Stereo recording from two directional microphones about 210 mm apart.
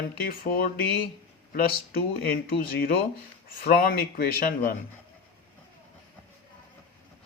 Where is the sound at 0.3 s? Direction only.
45° left (ahead or behind).